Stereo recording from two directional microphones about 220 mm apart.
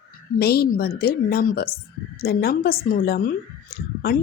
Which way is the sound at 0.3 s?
45° left (ahead or behind).